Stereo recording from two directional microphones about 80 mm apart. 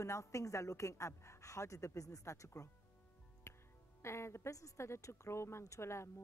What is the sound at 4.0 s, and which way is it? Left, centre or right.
Speech, left.